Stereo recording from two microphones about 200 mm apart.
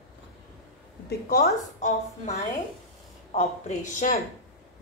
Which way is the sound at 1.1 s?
50° left (ahead or behind).